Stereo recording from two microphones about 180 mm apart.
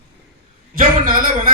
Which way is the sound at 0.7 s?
50° right (ahead or behind).